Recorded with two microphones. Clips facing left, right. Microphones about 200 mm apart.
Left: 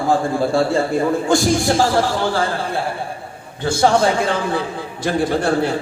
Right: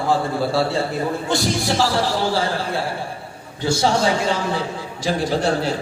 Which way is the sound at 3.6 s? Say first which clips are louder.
Left 3 dB; 55° left (ahead or behind).